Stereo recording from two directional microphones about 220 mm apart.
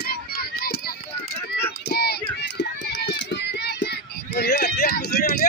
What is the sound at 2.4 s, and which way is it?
Run, 50° left (ahead or behind).